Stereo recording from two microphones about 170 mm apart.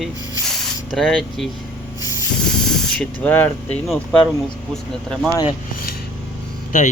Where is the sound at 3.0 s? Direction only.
10° left (ahead or behind).